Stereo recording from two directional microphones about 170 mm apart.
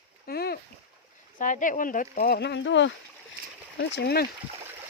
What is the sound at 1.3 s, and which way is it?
Speech, 50° left (ahead or behind).